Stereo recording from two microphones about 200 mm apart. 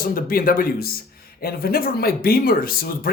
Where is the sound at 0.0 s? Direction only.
45° left (ahead or behind).